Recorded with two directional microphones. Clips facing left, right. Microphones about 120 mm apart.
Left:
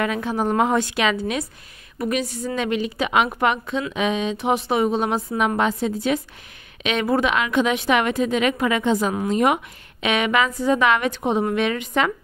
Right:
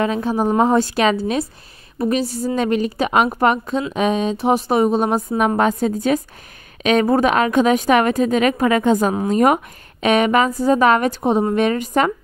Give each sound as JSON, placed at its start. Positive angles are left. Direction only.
{"t": 0.0, "sound": "a woman's voice", "side_deg": -35}